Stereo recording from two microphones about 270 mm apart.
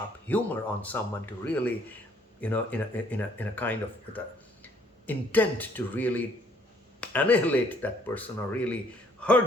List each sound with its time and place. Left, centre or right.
0.3 s speech: centre